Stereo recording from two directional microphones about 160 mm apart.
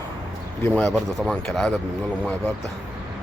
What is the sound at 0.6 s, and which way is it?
A man's voice, 10° left (ahead or behind).